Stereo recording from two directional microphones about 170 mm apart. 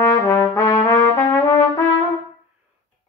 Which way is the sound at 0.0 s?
15° left (ahead or behind).